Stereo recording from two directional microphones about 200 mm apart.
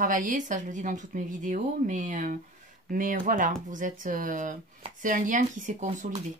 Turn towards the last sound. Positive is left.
turn(degrees=-40)  # may be behind; listen again after turning